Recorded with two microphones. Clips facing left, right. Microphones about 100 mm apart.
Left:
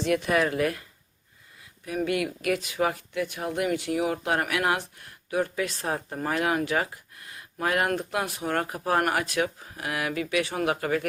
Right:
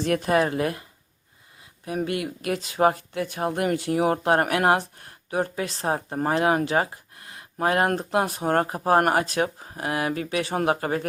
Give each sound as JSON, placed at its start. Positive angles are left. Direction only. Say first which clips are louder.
{"t": 0.0, "sound": "speech", "louder": "right 2 dB", "side_deg": -40}